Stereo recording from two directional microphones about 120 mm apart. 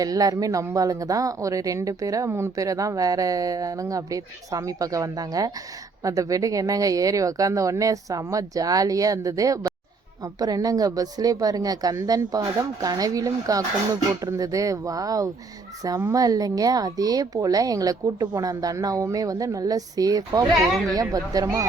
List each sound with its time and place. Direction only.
0.0 s a woman's voice: 30° right (ahead or behind)